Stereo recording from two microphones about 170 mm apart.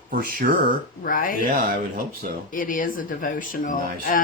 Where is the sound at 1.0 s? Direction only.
55° left (ahead or behind).